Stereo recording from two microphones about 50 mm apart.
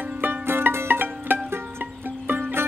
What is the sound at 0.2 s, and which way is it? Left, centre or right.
Music, right.